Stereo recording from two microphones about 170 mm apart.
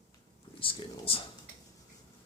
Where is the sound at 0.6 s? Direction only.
30° left (ahead or behind).